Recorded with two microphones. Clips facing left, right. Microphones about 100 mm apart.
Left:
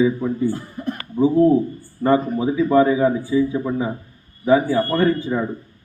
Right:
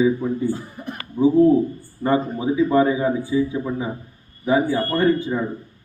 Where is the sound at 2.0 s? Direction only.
20° right (ahead or behind).